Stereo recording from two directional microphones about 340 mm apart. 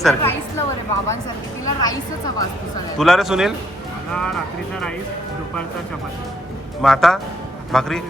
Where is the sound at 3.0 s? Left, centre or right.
Centre.